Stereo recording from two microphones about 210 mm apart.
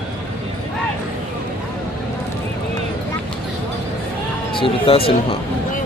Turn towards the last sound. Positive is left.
turn(degrees=25)  # may be behind; listen again after turning